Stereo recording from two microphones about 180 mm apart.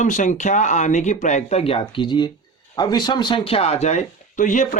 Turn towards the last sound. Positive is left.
turn(degrees=45)  # may be behind; listen again after turning